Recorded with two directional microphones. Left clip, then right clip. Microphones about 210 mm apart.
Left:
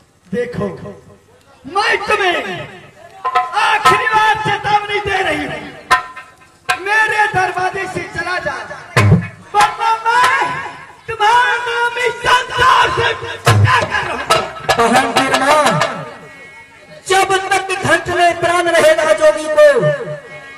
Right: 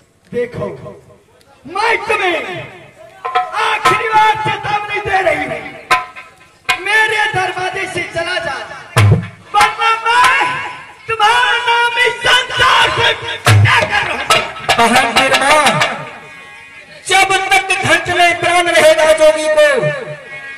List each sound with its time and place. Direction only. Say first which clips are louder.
1.8 s speech: even; 50° left (ahead or behind)
3.3 s music: left 1 dB; 50° left (ahead or behind)
6.7 s speech: right 1 dB; 50° left (ahead or behind)
9.5 s a sound: right 1 dB; 50° left (ahead or behind)
17.1 s a man's voice: right 2 dB; 50° left (ahead or behind)